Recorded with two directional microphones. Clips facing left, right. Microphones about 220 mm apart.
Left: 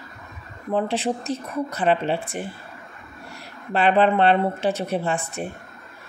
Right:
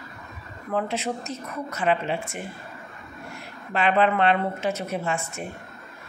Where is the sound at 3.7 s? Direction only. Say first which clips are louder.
Left 3 dB; 35° left (ahead or behind).